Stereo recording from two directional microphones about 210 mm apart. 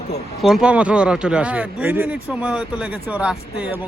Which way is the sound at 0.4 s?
5° right (ahead or behind).